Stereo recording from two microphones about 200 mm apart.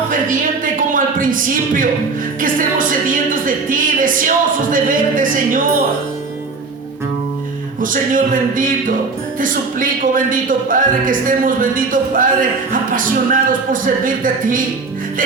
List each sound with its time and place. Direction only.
0.1 s a sound: 40° right (ahead or behind)
2.4 s speech: 45° right (ahead or behind)
7.8 s speech: 40° right (ahead or behind)